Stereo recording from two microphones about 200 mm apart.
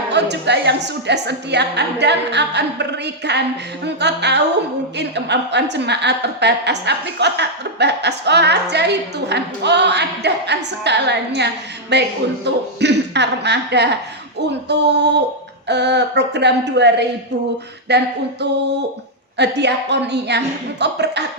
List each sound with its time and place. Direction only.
0.1 s a woman's voice: 60° right (ahead or behind)